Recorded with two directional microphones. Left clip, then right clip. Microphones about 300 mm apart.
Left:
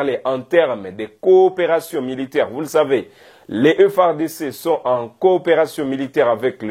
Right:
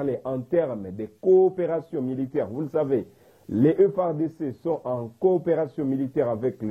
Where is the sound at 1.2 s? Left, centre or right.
Left.